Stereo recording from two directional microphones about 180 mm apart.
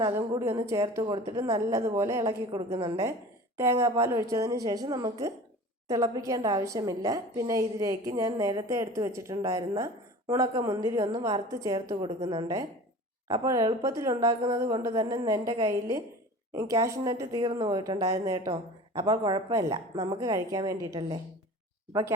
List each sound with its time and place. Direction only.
0.3 s a woman's voice: 15° right (ahead or behind)
11.9 s a woman's voice: 30° right (ahead or behind)